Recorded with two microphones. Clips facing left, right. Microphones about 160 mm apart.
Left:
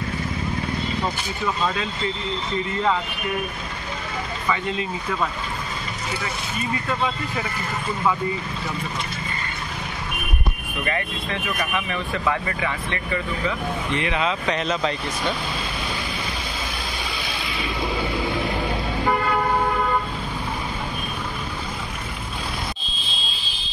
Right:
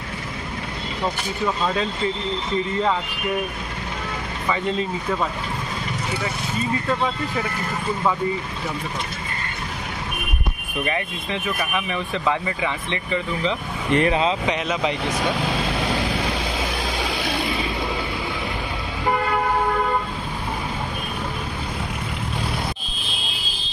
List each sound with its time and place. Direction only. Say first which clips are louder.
11.5 s speech: right 1 dB; 15° right (ahead or behind)
13.9 s speech: right 6 dB; 35° right (ahead or behind)
14.5 s speech: even; 15° right (ahead or behind)